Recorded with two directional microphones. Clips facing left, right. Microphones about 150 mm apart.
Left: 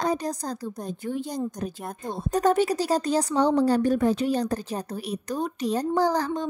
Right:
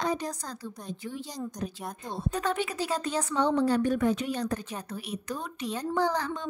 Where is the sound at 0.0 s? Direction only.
40° left (ahead or behind).